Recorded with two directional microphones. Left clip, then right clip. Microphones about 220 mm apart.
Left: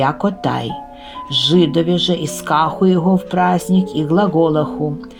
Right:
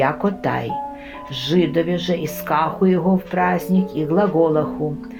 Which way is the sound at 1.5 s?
50° left (ahead or behind).